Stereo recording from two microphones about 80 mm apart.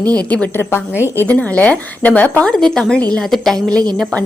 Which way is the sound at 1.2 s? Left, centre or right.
Centre.